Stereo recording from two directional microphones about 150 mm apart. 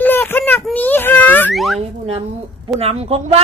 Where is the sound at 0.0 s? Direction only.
15° left (ahead or behind).